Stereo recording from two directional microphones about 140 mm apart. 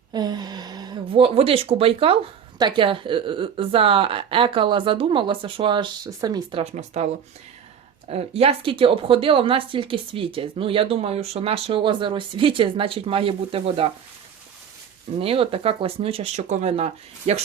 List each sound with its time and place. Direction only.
0.1 s a woman's voice: 30° right (ahead or behind)
6.1 s speech: 25° right (ahead or behind)
6.6 s speech: 50° right (ahead or behind)
8.1 s a woman's voice: 45° right (ahead or behind)
15.2 s speech: 40° right (ahead or behind)